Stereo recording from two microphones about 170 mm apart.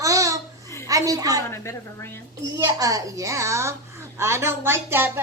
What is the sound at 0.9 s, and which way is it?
Speech, 20° right (ahead or behind).